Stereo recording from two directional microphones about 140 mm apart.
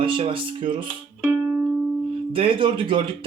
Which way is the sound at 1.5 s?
10° right (ahead or behind).